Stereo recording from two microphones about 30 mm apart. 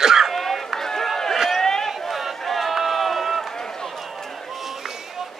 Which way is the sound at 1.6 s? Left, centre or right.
Centre.